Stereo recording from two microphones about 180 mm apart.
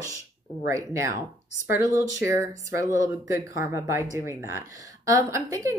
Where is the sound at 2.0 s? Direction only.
80° left.